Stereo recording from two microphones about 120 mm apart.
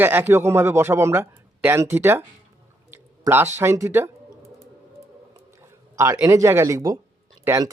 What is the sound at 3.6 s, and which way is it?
Speech, 25° right (ahead or behind).